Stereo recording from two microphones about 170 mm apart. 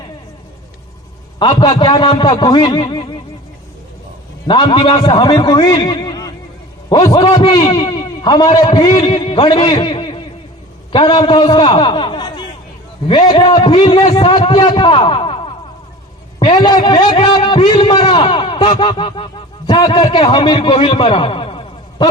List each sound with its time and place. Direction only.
1.4 s a man's voice: 25° left (ahead or behind)
4.4 s a man's voice: 30° left (ahead or behind)